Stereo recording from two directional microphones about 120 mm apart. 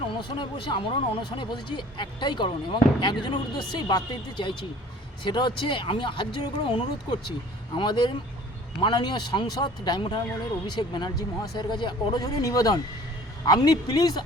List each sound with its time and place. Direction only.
0.1 s speech: 45° left (ahead or behind)